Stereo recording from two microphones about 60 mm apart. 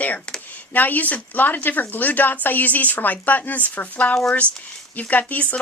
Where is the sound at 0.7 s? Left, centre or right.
Left.